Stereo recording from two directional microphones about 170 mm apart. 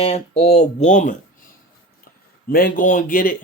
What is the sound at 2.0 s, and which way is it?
Speech, 60° left (ahead or behind).